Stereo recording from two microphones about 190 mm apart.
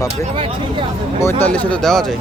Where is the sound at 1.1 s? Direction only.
10° left (ahead or behind).